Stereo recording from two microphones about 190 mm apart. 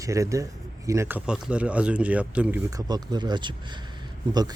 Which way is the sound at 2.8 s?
20° right (ahead or behind).